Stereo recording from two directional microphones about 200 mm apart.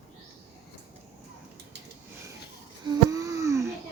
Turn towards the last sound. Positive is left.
turn(degrees=-15)  # may be behind; listen again after turning